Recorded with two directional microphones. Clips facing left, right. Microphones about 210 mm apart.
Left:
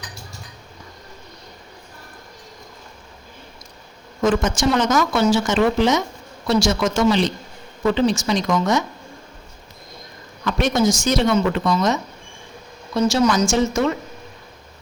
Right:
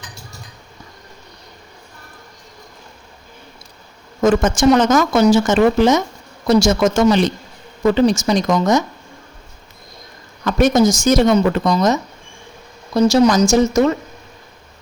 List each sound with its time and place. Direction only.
4.2 s a woman's voice: 50° right (ahead or behind)
10.4 s a woman's voice: 45° right (ahead or behind)